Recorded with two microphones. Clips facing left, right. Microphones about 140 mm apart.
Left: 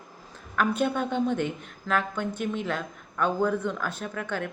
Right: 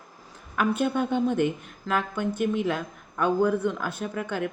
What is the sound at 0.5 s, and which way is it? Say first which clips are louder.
A woman's voice: right 1 dB; 5° right (ahead or behind).